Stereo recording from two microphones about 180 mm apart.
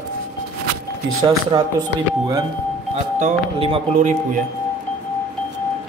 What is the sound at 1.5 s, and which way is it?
Speech, 25° right (ahead or behind).